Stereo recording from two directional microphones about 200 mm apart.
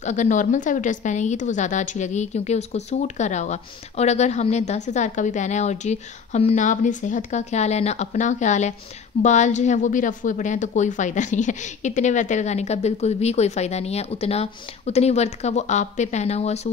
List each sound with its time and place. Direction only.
0.0 s a woman's voice: 35° left (ahead or behind)